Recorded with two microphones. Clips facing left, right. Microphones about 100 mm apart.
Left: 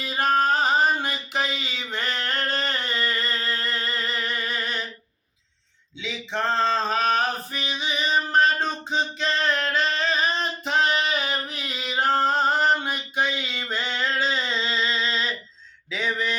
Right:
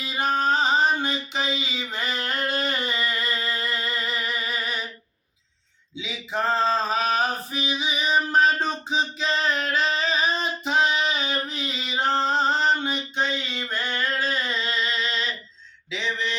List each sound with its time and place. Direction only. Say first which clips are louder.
0.0 s music: left 2 dB; centre (ahead or behind)
6.0 s male singing: even; 5° right (ahead or behind); by 15.3 s 35° left (ahead or behind)
15.9 s a sound: left 2 dB; 45° left (ahead or behind)